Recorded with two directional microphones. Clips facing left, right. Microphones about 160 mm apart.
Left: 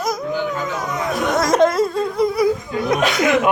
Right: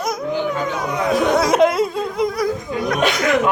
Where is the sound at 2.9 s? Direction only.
20° left (ahead or behind).